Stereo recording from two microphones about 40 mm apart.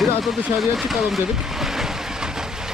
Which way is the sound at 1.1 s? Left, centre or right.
Centre.